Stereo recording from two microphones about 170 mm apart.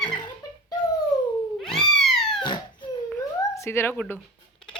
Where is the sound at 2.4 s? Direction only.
25° left (ahead or behind).